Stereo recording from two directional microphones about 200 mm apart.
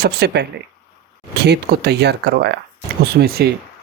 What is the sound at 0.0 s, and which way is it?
Speech, 55° right (ahead or behind).